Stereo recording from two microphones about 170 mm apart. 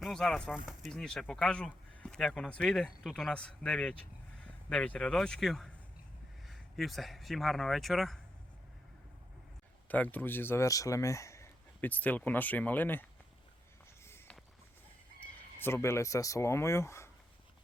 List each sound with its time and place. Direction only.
0.0 s speech: centre (ahead or behind)
9.9 s speech: 10° left (ahead or behind)
14.0 s a sound: 15° left (ahead or behind)
15.5 s speech: 15° left (ahead or behind)